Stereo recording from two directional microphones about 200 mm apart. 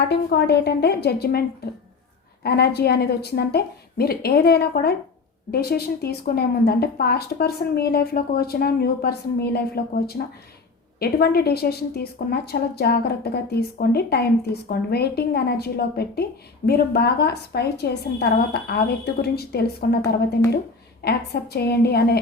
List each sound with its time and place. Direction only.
0.1 s a woman's voice: 55° left (ahead or behind)
21.0 s a woman's voice: 55° left (ahead or behind)